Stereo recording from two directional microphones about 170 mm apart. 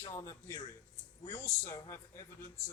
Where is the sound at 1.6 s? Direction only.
15° left (ahead or behind).